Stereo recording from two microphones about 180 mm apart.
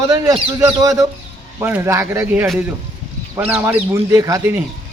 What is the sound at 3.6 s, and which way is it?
Speech, 10° right (ahead or behind).